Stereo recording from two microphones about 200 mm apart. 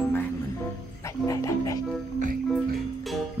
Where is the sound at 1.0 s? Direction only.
15° left (ahead or behind).